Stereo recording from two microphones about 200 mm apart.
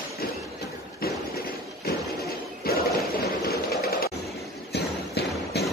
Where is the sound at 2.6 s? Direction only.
50° left (ahead or behind).